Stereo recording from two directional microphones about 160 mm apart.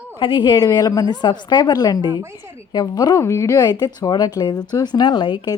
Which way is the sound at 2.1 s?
15° right (ahead or behind).